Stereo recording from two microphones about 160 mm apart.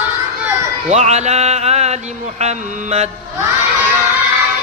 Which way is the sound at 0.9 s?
45° right (ahead or behind).